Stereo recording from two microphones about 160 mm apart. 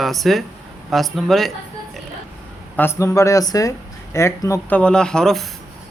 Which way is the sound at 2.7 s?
15° left (ahead or behind).